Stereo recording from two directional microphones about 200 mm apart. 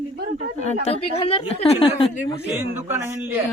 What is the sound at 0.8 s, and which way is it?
A woman's voice, 30° left (ahead or behind).